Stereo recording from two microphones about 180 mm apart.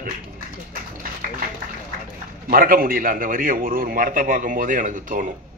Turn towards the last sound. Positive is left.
turn(degrees=-45)  # may be behind; listen again after turning